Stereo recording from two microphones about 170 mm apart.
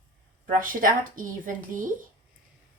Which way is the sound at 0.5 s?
55° right (ahead or behind).